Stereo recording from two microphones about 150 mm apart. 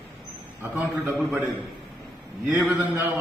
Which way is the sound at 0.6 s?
10° right (ahead or behind).